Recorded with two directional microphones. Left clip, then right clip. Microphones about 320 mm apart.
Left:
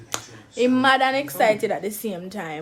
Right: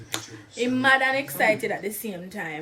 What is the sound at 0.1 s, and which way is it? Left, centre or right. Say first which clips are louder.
A woman's voice: left 2 dB; centre.